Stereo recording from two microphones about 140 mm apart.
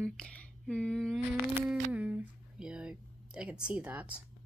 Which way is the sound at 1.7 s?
10° right (ahead or behind).